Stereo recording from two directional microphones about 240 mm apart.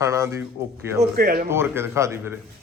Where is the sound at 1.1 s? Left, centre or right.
Right.